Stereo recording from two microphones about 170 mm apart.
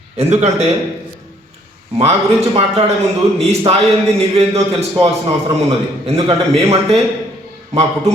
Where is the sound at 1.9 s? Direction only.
35° right (ahead or behind).